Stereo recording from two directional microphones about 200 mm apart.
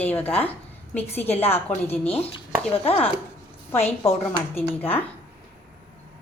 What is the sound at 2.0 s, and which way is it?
Chopping, 30° left (ahead or behind).